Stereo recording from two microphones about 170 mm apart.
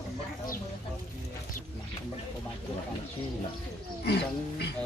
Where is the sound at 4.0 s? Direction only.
75° left (ahead or behind).